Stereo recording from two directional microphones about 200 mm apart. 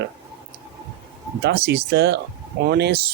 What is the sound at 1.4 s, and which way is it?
Speech, 55° right (ahead or behind).